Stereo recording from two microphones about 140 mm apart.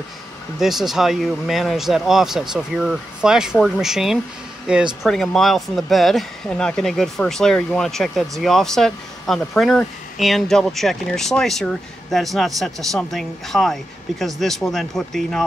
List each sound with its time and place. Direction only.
0.6 s speech: centre (ahead or behind)